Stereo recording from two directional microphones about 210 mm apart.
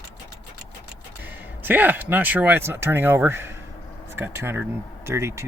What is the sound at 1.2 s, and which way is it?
Speech, 10° right (ahead or behind).